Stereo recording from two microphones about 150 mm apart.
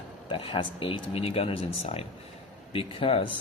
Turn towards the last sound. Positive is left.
turn(degrees=35)  # may be behind; listen again after turning